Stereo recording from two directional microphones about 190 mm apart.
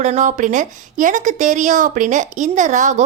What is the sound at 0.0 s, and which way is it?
A woman's voice, 40° right (ahead or behind).